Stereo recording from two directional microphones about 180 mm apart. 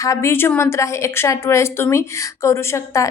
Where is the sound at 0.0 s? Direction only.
15° left (ahead or behind).